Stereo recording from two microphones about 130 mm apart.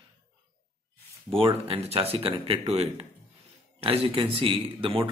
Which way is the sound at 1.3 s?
45° right (ahead or behind).